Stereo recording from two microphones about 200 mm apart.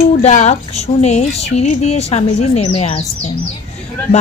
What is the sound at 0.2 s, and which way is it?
Speech, 35° left (ahead or behind).